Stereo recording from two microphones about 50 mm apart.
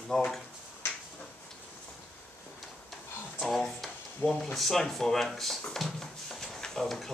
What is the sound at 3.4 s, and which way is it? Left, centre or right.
Speech, centre.